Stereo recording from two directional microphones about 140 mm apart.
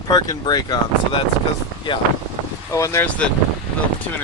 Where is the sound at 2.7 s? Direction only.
20° left (ahead or behind).